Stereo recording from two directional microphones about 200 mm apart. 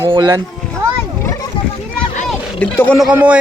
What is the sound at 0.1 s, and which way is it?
Speech, 20° right (ahead or behind).